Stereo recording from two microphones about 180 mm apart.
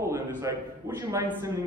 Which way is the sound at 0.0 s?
15° right (ahead or behind).